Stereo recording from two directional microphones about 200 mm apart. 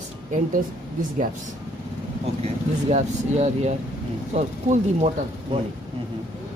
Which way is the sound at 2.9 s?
35° right (ahead or behind).